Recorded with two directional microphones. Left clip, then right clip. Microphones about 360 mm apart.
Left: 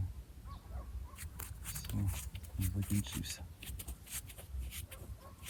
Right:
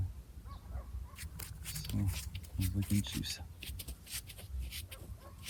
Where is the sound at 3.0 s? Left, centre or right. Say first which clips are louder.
Right 4 dB; centre.